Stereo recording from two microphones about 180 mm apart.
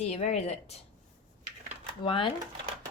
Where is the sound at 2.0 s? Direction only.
30° left (ahead or behind).